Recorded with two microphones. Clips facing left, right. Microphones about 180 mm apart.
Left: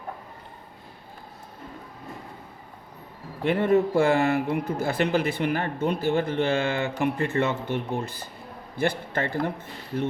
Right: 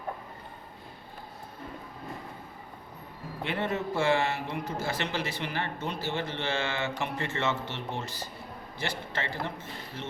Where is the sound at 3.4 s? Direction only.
50° left (ahead or behind).